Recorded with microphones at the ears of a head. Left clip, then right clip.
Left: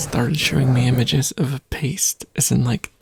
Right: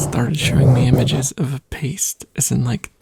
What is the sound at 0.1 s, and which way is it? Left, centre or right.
Speech, centre.